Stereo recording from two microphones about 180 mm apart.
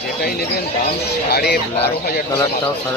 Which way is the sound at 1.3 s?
60° left (ahead or behind).